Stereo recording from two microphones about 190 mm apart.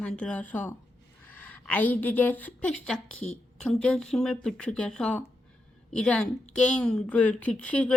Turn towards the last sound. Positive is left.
turn(degrees=5)  # may be behind; listen again after turning